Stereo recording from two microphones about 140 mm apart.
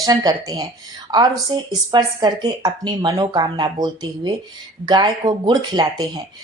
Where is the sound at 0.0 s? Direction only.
30° right (ahead or behind).